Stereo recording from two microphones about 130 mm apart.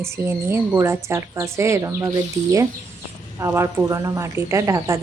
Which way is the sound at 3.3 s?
20° right (ahead or behind).